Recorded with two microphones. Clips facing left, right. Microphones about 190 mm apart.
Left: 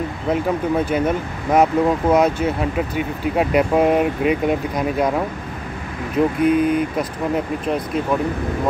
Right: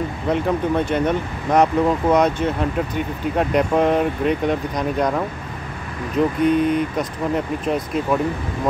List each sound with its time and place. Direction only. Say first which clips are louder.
0.3 s speech: even; 5° left (ahead or behind)
6.4 s speech: left 1 dB; 5° left (ahead or behind)